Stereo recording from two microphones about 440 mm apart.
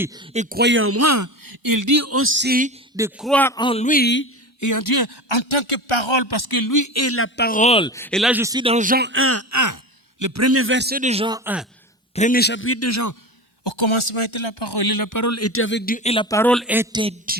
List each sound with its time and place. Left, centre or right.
0.0 s speech: centre
2.9 s a man's voice: centre; by 4.3 s left
4.6 s a man's voice: left; by 11.6 s centre
12.1 s a man's voice: centre; by 13.1 s left
13.7 s a man's voice: left; by 17.3 s centre